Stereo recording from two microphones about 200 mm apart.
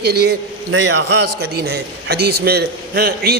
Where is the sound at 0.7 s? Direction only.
65° right (ahead or behind).